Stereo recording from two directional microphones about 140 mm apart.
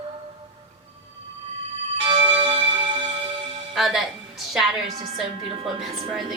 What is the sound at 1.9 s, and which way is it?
Music, 35° right (ahead or behind).